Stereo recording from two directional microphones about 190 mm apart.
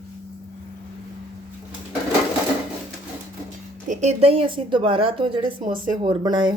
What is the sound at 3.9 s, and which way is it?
Speech, 35° right (ahead or behind).